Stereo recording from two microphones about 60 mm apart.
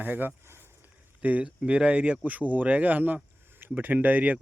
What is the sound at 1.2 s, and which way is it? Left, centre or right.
Speech, right.